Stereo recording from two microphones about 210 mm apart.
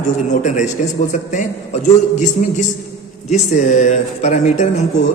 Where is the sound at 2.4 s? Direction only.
35° left (ahead or behind).